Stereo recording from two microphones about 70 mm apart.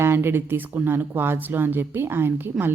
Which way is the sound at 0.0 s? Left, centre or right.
Right.